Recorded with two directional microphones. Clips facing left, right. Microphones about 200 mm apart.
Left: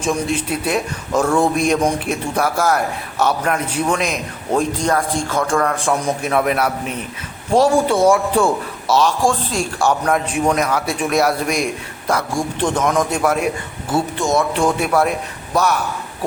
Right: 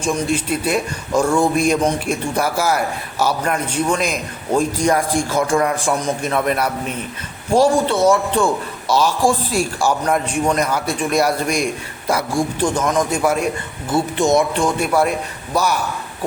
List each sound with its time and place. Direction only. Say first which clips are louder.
0.0 s a man's voice: even; centre (ahead or behind)
4.8 s a man's voice: right 2 dB; 10° right (ahead or behind)
6.0 s a man's voice: left 1 dB; 5° left (ahead or behind)
14.2 s speech: right 4 dB; 20° right (ahead or behind)
14.5 s a man's voice: left 1 dB; 5° left (ahead or behind)